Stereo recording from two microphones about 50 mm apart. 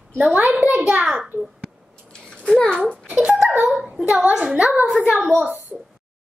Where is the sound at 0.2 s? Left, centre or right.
Right.